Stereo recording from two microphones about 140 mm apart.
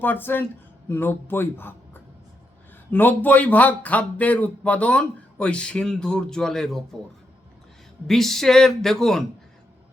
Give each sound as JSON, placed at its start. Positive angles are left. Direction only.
{"t": 0.0, "sound": "speech", "side_deg": 15}
{"t": 8.0, "sound": "speech", "side_deg": 0}